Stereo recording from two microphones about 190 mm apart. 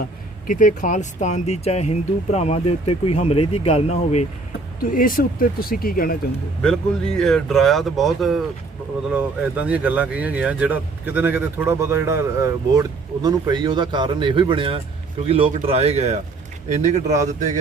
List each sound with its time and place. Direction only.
0.4 s speech: 45° left (ahead or behind)
4.8 s speech: 45° left (ahead or behind)
7.2 s a man's voice: centre (ahead or behind); by 17.6 s 40° right (ahead or behind)